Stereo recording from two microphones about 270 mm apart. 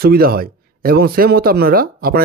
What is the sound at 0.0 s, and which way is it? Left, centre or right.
Speech, right.